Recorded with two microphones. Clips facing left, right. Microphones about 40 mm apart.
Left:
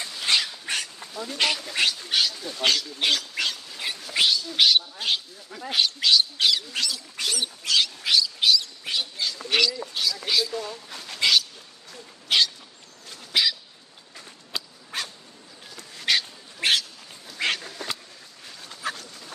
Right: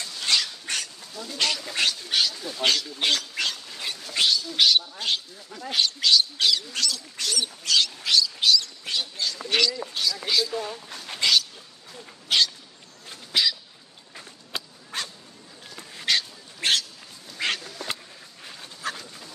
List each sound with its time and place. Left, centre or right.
0.1 s dog: centre
1.1 s speech: left
1.8 s a man's voice: centre
11.1 s dog: centre
13.3 s bird: centre
14.9 s dog: centre
17.4 s duck: centre
17.8 s a sound: centre
18.8 s dog: centre